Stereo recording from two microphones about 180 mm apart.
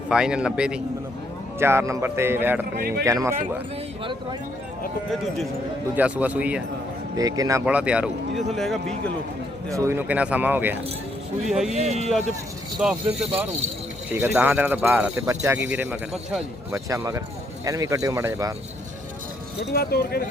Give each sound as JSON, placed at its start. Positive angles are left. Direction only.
{"t": 0.1, "sound": "speech", "side_deg": -5}
{"t": 2.7, "sound": "speech", "side_deg": -55}
{"t": 3.0, "sound": "speech", "side_deg": -20}
{"t": 5.1, "sound": "speech", "side_deg": 0}
{"t": 7.2, "sound": "speech", "side_deg": -20}
{"t": 7.6, "sound": "speech", "side_deg": -5}
{"t": 9.7, "sound": "speech", "side_deg": -15}
{"t": 11.7, "sound": "speech", "side_deg": -40}
{"t": 12.8, "sound": "speech", "side_deg": -5}
{"t": 19.7, "sound": "speech", "side_deg": 60}